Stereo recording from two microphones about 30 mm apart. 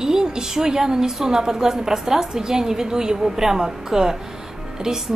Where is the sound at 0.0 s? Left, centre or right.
Right.